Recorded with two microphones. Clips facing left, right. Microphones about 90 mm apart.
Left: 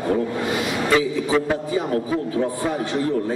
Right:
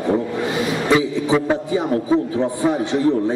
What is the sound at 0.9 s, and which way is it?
Speech, 20° right (ahead or behind).